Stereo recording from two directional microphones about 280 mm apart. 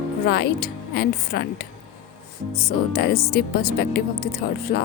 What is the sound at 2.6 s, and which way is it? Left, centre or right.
Speech, left.